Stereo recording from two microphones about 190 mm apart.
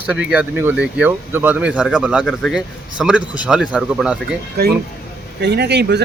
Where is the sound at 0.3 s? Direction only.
10° right (ahead or behind).